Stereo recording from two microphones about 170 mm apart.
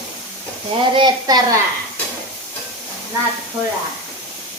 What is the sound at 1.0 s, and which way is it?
Speech, 25° right (ahead or behind).